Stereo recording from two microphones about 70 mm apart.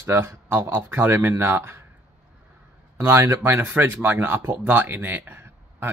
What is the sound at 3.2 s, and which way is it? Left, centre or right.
Speech, right.